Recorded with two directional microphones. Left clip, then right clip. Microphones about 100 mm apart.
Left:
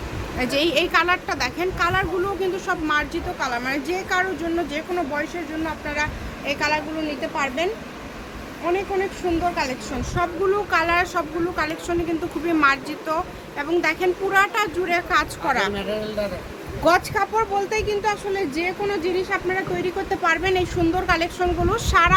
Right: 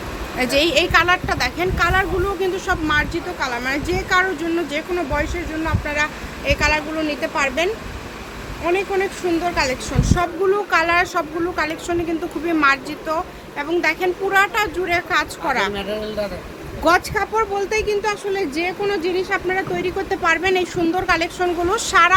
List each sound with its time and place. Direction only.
0.3 s a woman's voice: 20° right (ahead or behind)
12.5 s a woman's voice: 10° right (ahead or behind)
15.7 s speech: 25° right (ahead or behind)
16.8 s a woman's voice: 10° right (ahead or behind)